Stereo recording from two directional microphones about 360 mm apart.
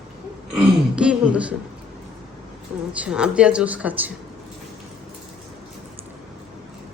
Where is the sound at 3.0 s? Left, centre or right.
Centre.